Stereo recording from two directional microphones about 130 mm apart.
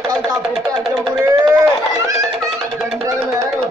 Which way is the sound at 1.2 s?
25° right (ahead or behind).